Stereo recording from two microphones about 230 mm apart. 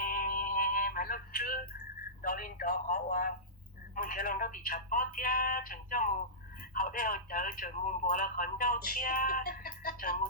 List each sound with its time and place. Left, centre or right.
0.0 s synthetic singing: left
2.2 s speech: left